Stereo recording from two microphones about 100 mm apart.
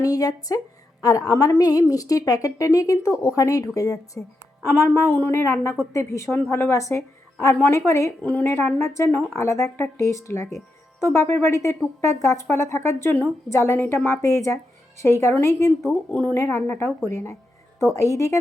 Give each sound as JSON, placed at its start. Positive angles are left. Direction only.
{"t": 0.0, "sound": "a woman's voice", "side_deg": 35}
{"t": 8.2, "sound": "a woman's voice", "side_deg": 20}